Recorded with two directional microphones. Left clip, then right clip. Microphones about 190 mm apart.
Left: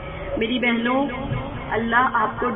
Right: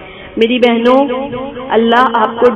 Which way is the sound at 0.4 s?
35° right (ahead or behind).